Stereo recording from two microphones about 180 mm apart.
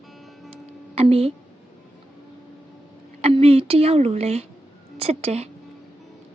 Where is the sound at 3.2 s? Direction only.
35° right (ahead or behind).